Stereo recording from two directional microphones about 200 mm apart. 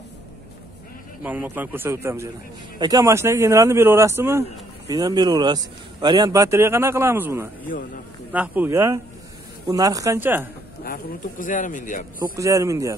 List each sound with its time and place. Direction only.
1.2 s speech: 10° right (ahead or behind)
10.8 s speech: 45° left (ahead or behind)
12.4 s speech: 15° right (ahead or behind)